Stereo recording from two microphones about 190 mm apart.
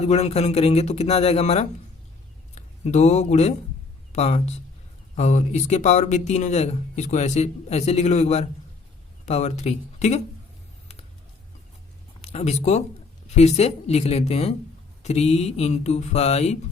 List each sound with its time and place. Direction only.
0.0 s speech: 35° left (ahead or behind)
12.2 s speech: 35° left (ahead or behind)